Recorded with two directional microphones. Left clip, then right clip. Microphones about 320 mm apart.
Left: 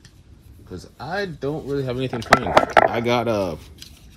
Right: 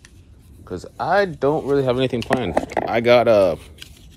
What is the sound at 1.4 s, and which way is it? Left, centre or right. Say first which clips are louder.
Speech: right 7 dB; right.